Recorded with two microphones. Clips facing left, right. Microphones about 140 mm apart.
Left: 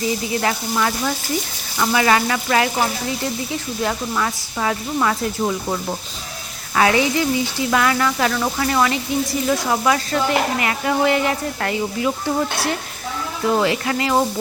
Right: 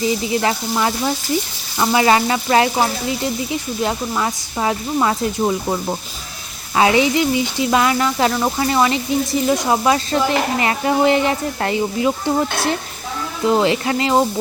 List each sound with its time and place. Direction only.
0.4 s speech: 20° right (ahead or behind)